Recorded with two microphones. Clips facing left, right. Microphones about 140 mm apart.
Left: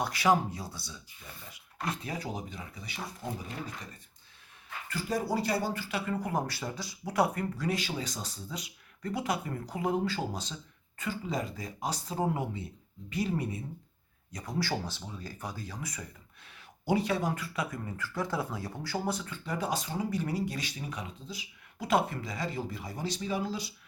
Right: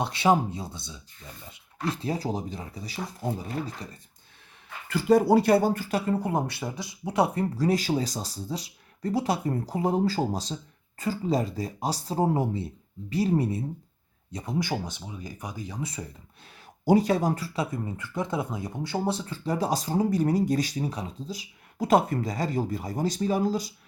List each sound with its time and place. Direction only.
0.0 s speech: 25° right (ahead or behind)
4.9 s speech: 70° right (ahead or behind); by 6.0 s 45° right (ahead or behind)
6.1 s speech: 30° right (ahead or behind)
7.5 s speech: 35° right (ahead or behind)
14.3 s speech: 20° right (ahead or behind)
16.8 s speech: 40° right (ahead or behind)